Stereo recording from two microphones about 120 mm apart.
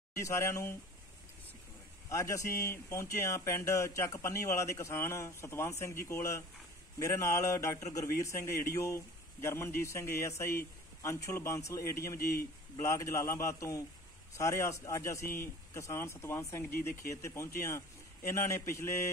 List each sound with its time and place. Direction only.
0.1 s a man's voice: 25° left (ahead or behind)
2.0 s a man's voice: 25° left (ahead or behind)